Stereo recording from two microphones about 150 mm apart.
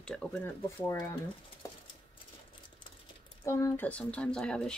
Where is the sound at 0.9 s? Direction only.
20° left (ahead or behind).